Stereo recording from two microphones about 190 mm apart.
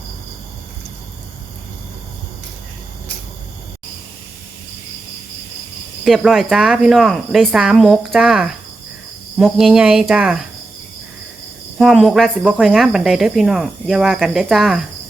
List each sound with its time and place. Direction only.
6.1 s speech: centre (ahead or behind)
11.8 s speech: centre (ahead or behind)